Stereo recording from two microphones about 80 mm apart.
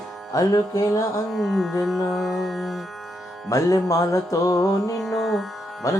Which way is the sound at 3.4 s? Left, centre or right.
Left.